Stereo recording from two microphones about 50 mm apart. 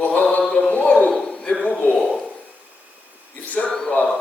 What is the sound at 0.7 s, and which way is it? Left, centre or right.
Speech, left.